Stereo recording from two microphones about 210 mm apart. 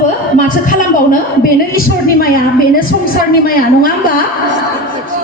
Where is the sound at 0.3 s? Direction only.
40° left (ahead or behind).